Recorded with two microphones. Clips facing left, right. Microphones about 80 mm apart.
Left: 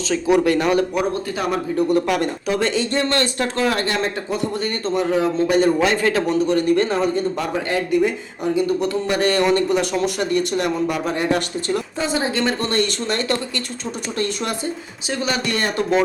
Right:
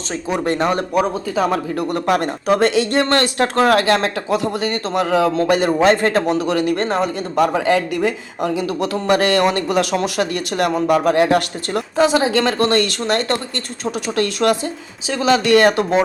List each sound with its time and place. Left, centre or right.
0.1 s speech: right
1.7 s speech: right
2.0 s speech: right
5.8 s a man's voice: right
6.2 s speech: right
6.7 s speech: right
9.4 s speech: right
10.7 s speech: right
15.3 s speech: right